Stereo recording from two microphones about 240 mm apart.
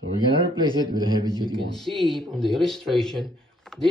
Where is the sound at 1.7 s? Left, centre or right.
Centre.